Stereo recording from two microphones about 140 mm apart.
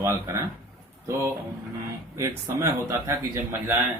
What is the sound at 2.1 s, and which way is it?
Speech, 20° right (ahead or behind).